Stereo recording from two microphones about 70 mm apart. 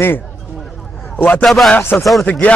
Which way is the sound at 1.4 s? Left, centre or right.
Centre.